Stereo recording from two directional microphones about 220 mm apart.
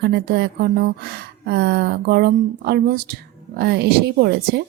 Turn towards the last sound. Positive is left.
turn(degrees=-45)  # may be behind; listen again after turning